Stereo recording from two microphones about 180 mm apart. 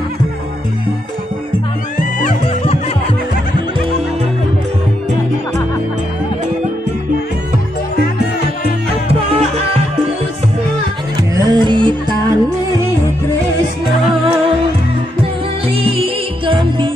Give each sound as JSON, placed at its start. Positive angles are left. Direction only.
{"t": 11.3, "sound": "music", "side_deg": -20}
{"t": 15.7, "sound": "music", "side_deg": -30}